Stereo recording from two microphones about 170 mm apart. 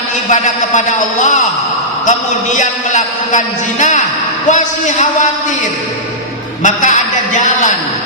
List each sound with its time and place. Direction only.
0.3 s a man's voice: 45° left (ahead or behind)
6.6 s a man's voice: 45° left (ahead or behind)